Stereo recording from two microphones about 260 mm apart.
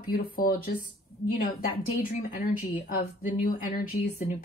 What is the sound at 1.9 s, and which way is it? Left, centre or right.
Speech, left.